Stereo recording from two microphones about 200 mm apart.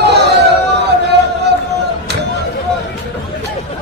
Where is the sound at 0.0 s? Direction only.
55° right (ahead or behind).